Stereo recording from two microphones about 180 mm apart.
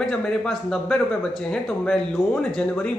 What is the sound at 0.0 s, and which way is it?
Speech, 5° left (ahead or behind).